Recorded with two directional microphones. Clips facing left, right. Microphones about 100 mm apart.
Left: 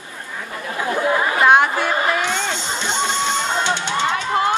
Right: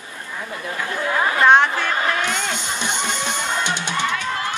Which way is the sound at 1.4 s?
5° left (ahead or behind).